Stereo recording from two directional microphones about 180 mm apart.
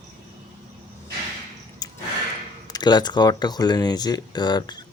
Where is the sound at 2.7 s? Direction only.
25° left (ahead or behind).